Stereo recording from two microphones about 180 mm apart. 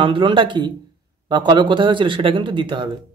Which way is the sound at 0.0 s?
30° right (ahead or behind).